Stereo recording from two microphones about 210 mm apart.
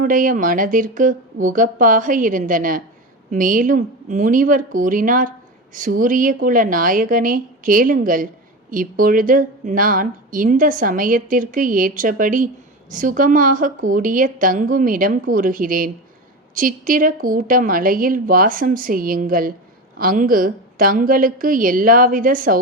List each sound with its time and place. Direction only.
0.0 s a woman's voice: 40° right (ahead or behind)